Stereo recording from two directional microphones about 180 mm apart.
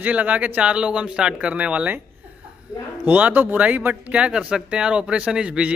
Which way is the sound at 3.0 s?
10° right (ahead or behind).